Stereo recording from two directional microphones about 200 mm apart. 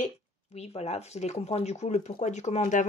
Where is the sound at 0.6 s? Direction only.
30° left (ahead or behind).